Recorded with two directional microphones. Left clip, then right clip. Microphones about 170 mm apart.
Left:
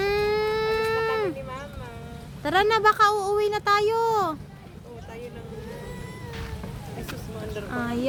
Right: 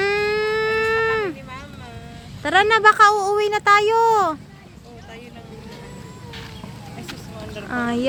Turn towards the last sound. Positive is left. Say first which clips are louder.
# right 6 dB
turn(degrees=-40)  # may be behind; listen again after turning